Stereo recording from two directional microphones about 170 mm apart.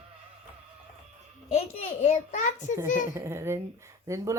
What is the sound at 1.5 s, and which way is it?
A child's voice, 40° left (ahead or behind).